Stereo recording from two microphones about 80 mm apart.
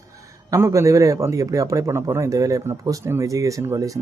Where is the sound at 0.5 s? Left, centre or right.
Right.